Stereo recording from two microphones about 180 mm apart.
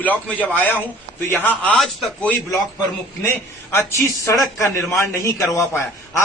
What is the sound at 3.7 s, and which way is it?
A man's voice, 15° left (ahead or behind).